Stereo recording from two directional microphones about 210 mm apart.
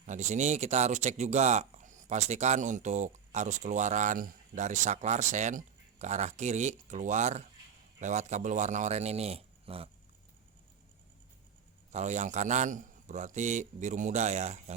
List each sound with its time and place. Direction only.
0.0 s speech: 35° right (ahead or behind)
11.9 s speech: 35° right (ahead or behind)